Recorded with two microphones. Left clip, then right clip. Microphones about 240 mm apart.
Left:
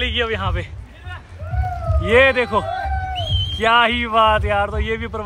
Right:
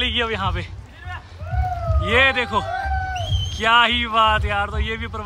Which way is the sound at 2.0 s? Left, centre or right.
Centre.